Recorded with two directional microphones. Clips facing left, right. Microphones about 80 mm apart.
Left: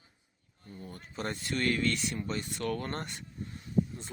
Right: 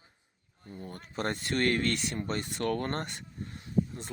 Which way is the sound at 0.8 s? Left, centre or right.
Right.